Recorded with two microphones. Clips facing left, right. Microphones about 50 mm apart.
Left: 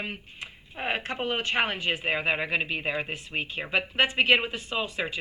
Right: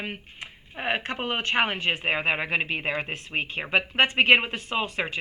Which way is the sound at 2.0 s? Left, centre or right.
Right.